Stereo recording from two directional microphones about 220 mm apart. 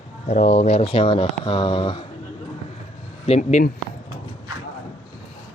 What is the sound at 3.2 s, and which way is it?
Speech, 30° left (ahead or behind).